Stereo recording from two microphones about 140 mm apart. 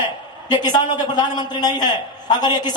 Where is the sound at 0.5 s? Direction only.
30° left (ahead or behind).